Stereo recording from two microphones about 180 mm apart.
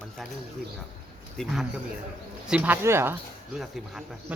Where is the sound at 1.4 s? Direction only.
5° left (ahead or behind).